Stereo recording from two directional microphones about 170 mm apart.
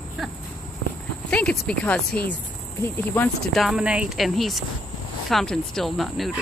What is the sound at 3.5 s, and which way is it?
Speech, 5° right (ahead or behind).